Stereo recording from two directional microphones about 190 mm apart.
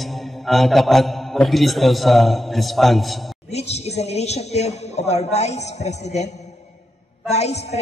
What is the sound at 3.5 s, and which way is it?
A woman's voice, 35° left (ahead or behind).